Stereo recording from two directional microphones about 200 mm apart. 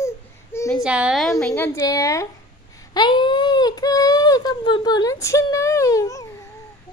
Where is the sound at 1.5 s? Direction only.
15° left (ahead or behind).